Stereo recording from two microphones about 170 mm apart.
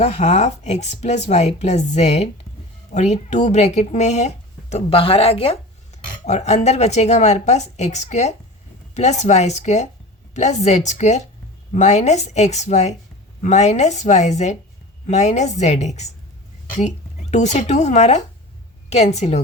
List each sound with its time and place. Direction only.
0.0 s a woman's voice: 40° left (ahead or behind)
17.3 s a woman's voice: 40° left (ahead or behind)